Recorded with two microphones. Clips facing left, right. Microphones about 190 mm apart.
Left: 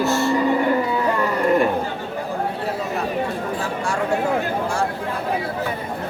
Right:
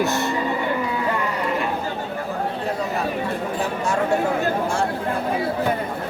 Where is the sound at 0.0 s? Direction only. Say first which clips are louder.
Left 3 dB; 20° right (ahead or behind).